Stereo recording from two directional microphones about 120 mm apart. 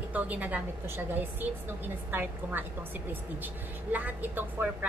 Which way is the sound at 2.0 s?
15° right (ahead or behind).